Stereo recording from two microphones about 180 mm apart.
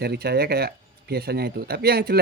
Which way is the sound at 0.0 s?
60° right (ahead or behind).